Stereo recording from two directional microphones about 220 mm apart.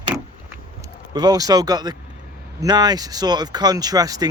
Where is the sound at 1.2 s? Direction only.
15° right (ahead or behind).